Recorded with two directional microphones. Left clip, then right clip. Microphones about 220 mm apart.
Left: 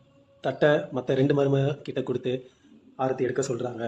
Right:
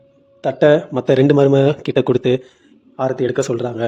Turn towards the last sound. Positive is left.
turn(degrees=-45)  # may be behind; listen again after turning